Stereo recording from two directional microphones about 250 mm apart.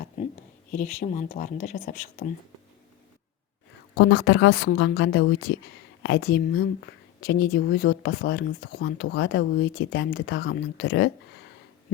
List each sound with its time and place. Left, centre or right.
0.9 s speech: left
3.9 s speech: left